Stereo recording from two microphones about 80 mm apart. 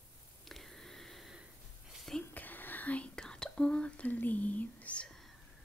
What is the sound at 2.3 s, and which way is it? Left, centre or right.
Whispering, left.